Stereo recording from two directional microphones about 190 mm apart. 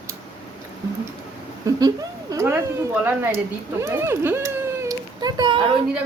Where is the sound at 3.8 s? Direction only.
15° right (ahead or behind).